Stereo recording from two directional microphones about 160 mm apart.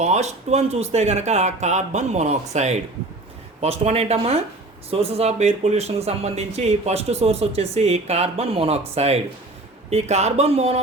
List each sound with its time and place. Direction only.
0.0 s speech: 45° right (ahead or behind)